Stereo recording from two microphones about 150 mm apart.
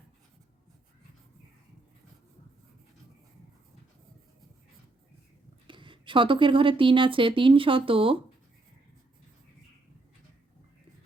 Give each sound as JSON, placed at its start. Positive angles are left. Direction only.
{"t": 5.6, "sound": "speech", "side_deg": -35}